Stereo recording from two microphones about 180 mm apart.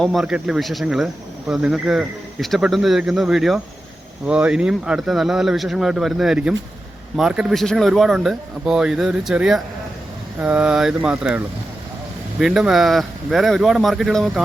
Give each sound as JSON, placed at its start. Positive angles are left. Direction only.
{"t": 0.0, "sound": "speech", "side_deg": 0}